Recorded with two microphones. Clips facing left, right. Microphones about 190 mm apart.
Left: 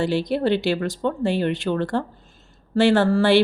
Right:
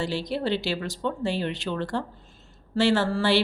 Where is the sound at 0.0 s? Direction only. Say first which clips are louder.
Left 6 dB; 55° left (ahead or behind).